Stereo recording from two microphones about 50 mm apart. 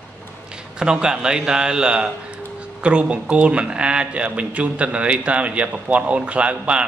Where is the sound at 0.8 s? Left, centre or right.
Centre.